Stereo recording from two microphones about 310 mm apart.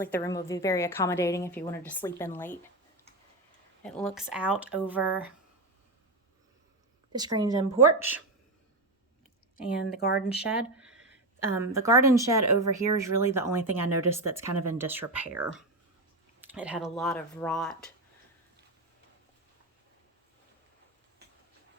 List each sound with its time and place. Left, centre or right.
0.0 s a woman's voice: centre
3.8 s speech: centre
7.1 s speech: centre
9.6 s speech: left
10.8 s a woman's voice: centre